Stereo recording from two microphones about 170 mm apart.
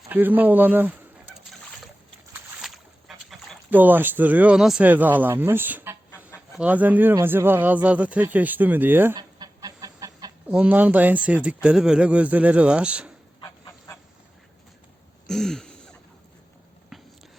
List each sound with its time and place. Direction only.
0.1 s speech: 10° right (ahead or behind)
2.6 s a sound: centre (ahead or behind)
3.7 s speech: 10° right (ahead or behind)
9.1 s chicken: 25° right (ahead or behind)
10.5 s speech: 10° right (ahead or behind)
13.4 s goose: 20° left (ahead or behind)
15.3 s a sound: centre (ahead or behind)
16.9 s biting: centre (ahead or behind)